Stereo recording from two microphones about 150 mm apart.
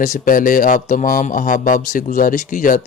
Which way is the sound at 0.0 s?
60° left (ahead or behind).